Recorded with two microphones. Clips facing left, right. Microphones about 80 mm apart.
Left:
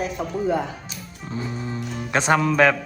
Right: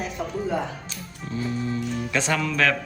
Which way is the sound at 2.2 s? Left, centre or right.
Left.